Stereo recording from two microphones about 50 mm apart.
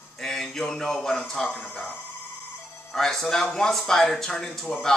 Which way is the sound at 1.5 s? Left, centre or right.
Left.